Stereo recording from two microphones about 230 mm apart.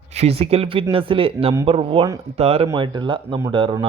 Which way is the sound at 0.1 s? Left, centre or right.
Right.